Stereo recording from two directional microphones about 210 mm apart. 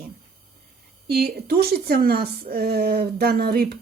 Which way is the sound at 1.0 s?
50° right (ahead or behind).